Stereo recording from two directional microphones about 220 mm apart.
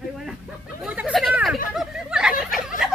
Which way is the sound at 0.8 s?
5° right (ahead or behind).